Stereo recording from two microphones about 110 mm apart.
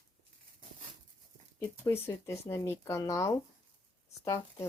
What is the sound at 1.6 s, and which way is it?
Speech, 25° left (ahead or behind).